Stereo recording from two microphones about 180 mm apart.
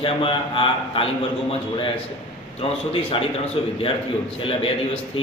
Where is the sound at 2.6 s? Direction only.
30° left (ahead or behind).